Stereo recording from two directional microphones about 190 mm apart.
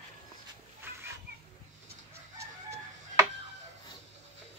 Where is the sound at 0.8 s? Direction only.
10° right (ahead or behind).